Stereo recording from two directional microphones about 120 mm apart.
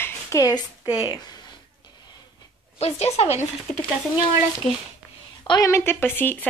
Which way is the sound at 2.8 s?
60° left (ahead or behind).